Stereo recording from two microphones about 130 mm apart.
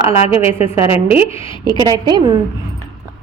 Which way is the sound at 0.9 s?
50° left (ahead or behind).